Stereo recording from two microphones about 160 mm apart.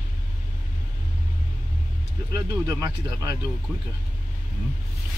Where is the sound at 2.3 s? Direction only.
20° right (ahead or behind).